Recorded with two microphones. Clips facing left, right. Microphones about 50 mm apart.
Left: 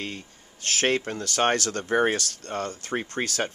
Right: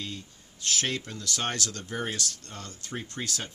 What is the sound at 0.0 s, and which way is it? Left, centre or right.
Speech, left.